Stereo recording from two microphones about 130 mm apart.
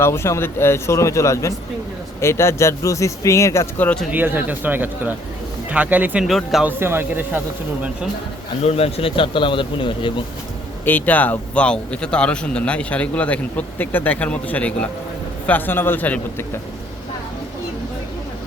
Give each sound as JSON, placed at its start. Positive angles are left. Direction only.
{"t": 0.0, "sound": "speech", "side_deg": 20}
{"t": 4.1, "sound": "speech", "side_deg": -15}
{"t": 6.2, "sound": "speech", "side_deg": 0}
{"t": 6.7, "sound": "speech", "side_deg": -15}
{"t": 8.6, "sound": "speech", "side_deg": 50}
{"t": 10.8, "sound": "a man's voice", "side_deg": 15}